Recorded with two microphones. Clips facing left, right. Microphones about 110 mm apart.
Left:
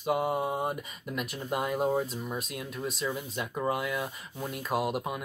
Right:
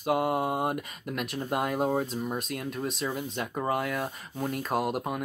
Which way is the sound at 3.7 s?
50° right (ahead or behind).